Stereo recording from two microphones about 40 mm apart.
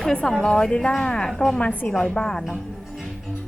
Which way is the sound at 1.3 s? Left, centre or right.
Centre.